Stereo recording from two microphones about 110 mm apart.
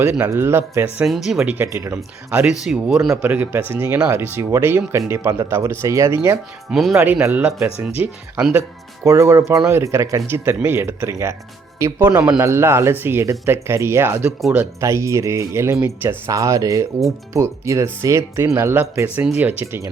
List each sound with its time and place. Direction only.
0.0 s speech: 25° right (ahead or behind)
1.0 s speech: 5° right (ahead or behind)
1.5 s speech: 25° right (ahead or behind)
2.3 s speech: 10° right (ahead or behind)
3.2 s speech: 15° right (ahead or behind)
6.7 s speech: centre (ahead or behind)
6.9 s speech: 20° right (ahead or behind)
9.0 s speech: 25° right (ahead or behind); by 12.4 s 10° right (ahead or behind)
12.4 s speech: 25° right (ahead or behind)